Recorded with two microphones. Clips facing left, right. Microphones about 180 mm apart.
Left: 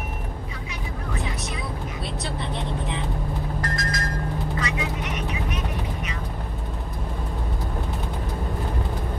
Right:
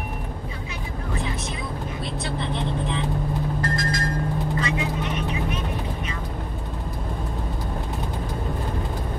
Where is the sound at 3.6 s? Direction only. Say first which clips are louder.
Right 3 dB; 30° right (ahead or behind).